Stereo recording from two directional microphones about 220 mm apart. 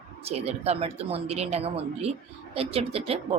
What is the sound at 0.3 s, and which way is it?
Speech, 30° right (ahead or behind).